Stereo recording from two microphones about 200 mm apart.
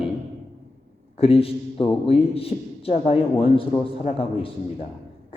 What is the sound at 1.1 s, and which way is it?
A man's voice, 30° left (ahead or behind).